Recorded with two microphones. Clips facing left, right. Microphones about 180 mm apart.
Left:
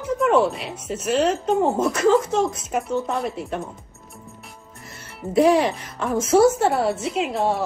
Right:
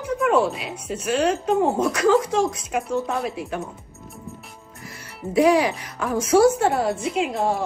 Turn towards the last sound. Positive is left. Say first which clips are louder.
# even
turn(degrees=0)  # may be behind; listen again after turning